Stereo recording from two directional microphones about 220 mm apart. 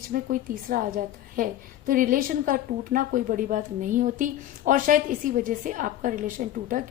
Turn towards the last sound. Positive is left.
turn(degrees=-35)  # may be behind; listen again after turning